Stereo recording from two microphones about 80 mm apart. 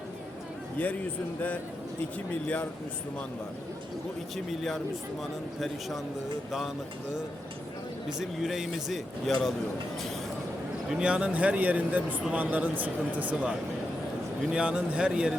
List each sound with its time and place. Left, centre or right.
0.8 s a man's voice: left
4.4 s speech: centre
8.2 s speech: centre
10.8 s speech: centre
14.5 s speech: centre